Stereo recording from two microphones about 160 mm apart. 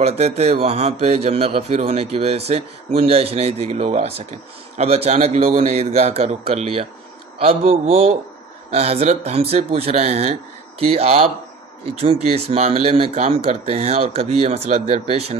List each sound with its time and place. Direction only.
0.0 s speech: 40° right (ahead or behind)